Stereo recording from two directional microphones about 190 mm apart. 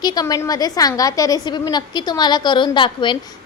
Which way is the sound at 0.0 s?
20° left (ahead or behind).